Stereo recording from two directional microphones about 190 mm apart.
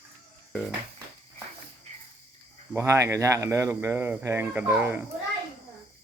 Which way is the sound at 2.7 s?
15° right (ahead or behind).